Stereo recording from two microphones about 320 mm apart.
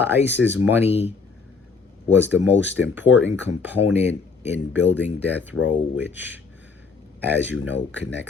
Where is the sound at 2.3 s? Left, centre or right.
Centre.